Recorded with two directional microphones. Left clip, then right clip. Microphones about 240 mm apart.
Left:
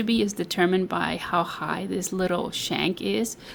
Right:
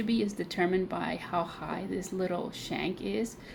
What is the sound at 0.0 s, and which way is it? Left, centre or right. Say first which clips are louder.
Speech: left 6 dB; left.